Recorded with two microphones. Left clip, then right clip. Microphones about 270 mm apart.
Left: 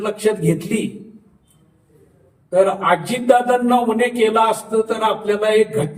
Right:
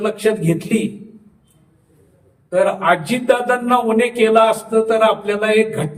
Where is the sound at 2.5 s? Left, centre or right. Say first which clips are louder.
Even; centre.